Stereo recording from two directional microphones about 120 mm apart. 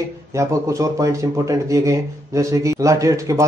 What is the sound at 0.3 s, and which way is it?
Speech, 25° right (ahead or behind).